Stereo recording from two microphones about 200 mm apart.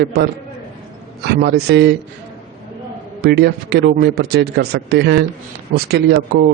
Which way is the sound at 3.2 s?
55° right (ahead or behind).